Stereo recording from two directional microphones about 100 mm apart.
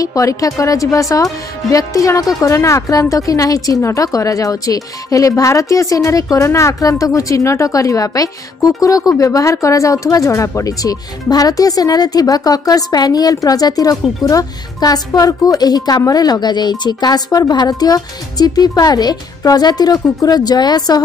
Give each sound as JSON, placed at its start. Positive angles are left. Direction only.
{"t": 0.0, "sound": "a woman's voice", "side_deg": 35}